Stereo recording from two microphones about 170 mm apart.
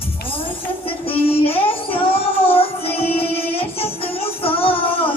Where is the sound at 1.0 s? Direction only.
35° left (ahead or behind).